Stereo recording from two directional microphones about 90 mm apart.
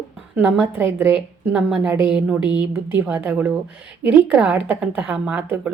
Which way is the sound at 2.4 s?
55° left (ahead or behind).